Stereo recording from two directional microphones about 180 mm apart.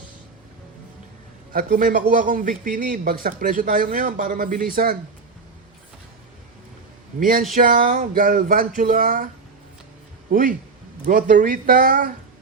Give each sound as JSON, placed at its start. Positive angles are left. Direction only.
{"t": 1.5, "sound": "speech", "side_deg": -50}
{"t": 7.2, "sound": "speech", "side_deg": -50}